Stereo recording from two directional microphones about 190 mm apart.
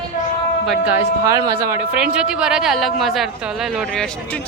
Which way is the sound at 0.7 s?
5° right (ahead or behind).